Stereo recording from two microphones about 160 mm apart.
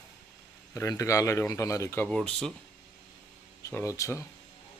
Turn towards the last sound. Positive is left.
turn(degrees=20)  # may be behind; listen again after turning